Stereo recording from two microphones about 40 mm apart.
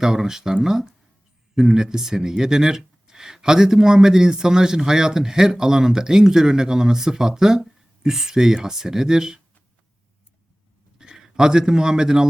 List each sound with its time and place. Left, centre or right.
0.0 s speech: centre
10.9 s a man's voice: centre